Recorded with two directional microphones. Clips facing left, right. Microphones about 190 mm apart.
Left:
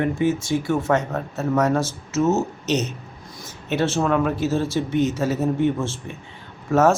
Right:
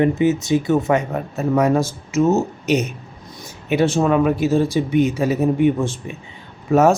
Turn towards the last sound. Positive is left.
turn(degrees=-15)  # may be behind; listen again after turning